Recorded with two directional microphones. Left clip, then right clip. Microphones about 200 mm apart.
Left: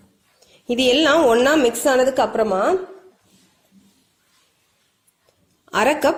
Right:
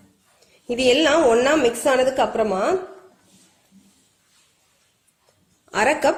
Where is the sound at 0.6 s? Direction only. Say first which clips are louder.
Left 1 dB; 50° left (ahead or behind); by 2.8 s 35° left (ahead or behind).